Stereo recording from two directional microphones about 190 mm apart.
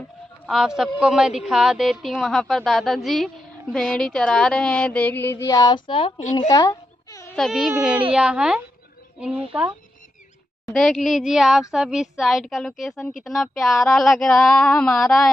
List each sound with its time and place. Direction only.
0.5 s a woman's voice: centre (ahead or behind)
3.7 s a sound: 5° left (ahead or behind); by 6.4 s 30° left (ahead or behind)
6.4 s a woman's voice: 20° left (ahead or behind)
7.3 s a woman's voice: centre (ahead or behind)
10.7 s a woman's voice: centre (ahead or behind)